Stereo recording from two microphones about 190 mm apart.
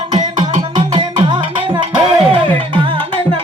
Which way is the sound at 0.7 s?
25° right (ahead or behind).